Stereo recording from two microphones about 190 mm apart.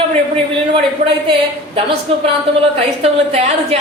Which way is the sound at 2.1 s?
30° right (ahead or behind).